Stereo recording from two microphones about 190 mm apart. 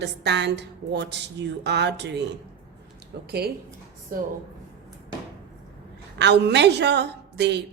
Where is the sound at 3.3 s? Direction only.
55° right (ahead or behind).